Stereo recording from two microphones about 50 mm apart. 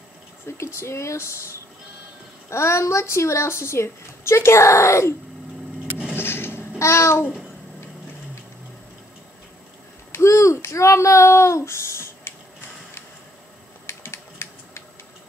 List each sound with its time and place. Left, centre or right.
0.5 s a woman's voice: left
2.5 s a woman's voice: left
6.1 s a sound: left
6.8 s babbling: left
10.1 s a sound: left
13.8 s typing: left